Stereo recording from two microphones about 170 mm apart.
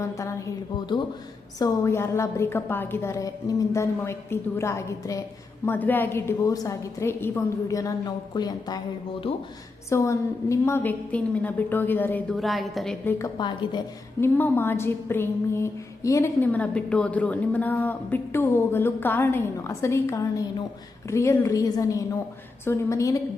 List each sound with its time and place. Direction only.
0.0 s a woman's voice: 15° left (ahead or behind)
9.9 s a woman's voice: 15° left (ahead or behind)
13.1 s a woman's voice: 20° left (ahead or behind)
14.2 s a woman's voice: 15° left (ahead or behind)